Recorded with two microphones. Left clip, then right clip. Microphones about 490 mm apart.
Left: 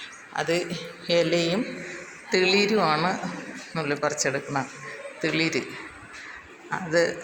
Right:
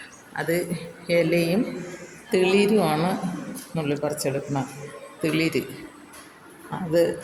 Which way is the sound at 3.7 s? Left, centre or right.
Right.